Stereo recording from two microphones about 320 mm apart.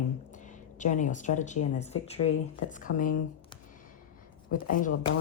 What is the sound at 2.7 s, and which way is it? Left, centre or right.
Speech, left.